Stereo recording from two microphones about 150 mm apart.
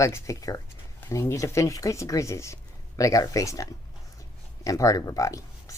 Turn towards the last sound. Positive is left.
turn(degrees=20)  # may be behind; listen again after turning